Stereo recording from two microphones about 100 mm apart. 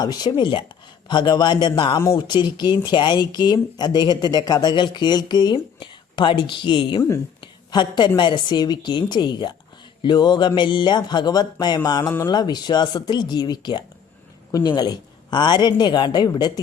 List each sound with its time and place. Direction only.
0.0 s speech: 45° left (ahead or behind)